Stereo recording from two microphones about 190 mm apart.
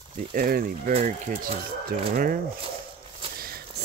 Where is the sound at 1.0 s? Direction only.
40° right (ahead or behind).